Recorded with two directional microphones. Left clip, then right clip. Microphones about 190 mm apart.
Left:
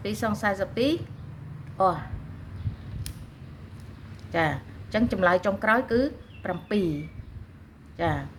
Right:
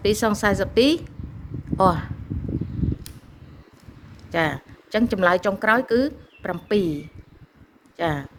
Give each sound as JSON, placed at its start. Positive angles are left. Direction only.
{"t": 0.0, "sound": "a woman's voice", "side_deg": -60}
{"t": 4.3, "sound": "a woman's voice", "side_deg": -60}